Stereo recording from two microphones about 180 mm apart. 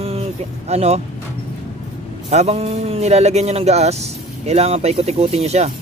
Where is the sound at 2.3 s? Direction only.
35° right (ahead or behind).